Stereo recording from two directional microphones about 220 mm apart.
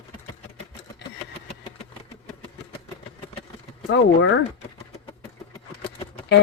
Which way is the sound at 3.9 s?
60° left (ahead or behind).